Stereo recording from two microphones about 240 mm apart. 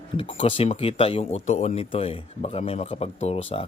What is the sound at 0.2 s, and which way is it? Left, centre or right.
Speech, left.